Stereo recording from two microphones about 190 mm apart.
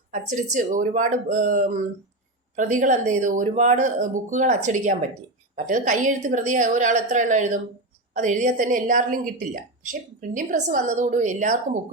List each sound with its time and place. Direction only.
0.1 s a woman's voice: 40° right (ahead or behind)